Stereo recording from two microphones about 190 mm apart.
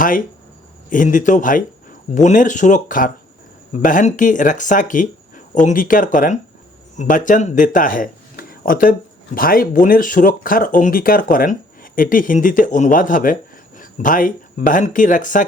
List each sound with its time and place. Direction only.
0.9 s speech: 45° left (ahead or behind)